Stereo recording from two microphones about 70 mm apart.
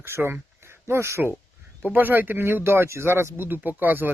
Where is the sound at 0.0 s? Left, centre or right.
Right.